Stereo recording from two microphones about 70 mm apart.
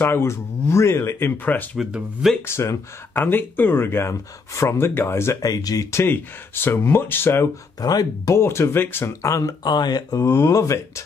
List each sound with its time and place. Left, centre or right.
0.0 s speech: left
1.4 s speech: left
2.4 s speech: left
3.3 s speech: left
5.4 s speech: left
6.0 s speech: left
7.8 s speech: left
8.3 s speech: left
9.2 s speech: left
9.7 s speech: left
10.2 s speech: left